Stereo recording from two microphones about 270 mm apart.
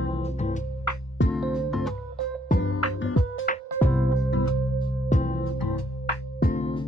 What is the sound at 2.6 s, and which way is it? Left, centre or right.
Music, left.